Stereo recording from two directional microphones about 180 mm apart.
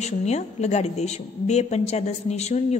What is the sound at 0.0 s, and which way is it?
A man's voice, 40° left (ahead or behind).